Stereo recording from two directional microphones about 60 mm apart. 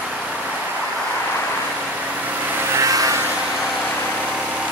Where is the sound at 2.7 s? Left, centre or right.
Right.